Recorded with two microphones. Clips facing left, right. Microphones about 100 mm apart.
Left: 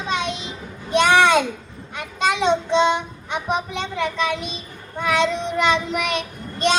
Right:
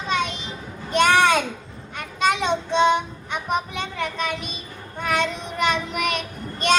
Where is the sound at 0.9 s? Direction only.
50° right (ahead or behind).